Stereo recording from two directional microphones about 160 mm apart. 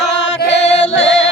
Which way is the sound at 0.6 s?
45° left (ahead or behind).